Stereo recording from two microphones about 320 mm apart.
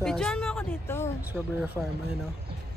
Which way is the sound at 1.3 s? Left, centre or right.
Centre.